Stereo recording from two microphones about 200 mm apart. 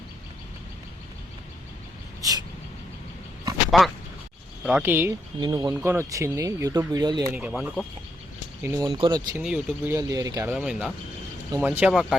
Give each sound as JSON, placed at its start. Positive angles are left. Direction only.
{"t": 3.7, "sound": "speech", "side_deg": 0}
{"t": 7.3, "sound": "speech", "side_deg": -5}
{"t": 8.6, "sound": "speech", "side_deg": -15}
{"t": 9.4, "sound": "speech", "side_deg": -10}